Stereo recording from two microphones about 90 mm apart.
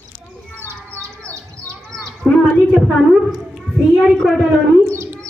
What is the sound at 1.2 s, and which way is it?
Bird, 10° left (ahead or behind).